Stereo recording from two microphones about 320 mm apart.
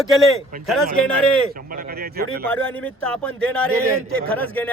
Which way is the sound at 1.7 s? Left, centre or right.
Right.